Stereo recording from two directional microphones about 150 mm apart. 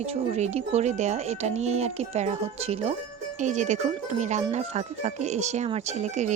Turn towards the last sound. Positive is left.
turn(degrees=-50)  # may be behind; listen again after turning